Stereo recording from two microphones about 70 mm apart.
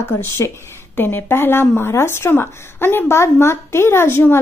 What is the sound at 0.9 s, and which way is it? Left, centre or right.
A woman's voice, left.